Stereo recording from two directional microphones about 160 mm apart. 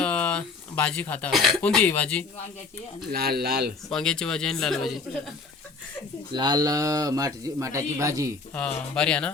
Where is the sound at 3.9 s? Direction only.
5° left (ahead or behind).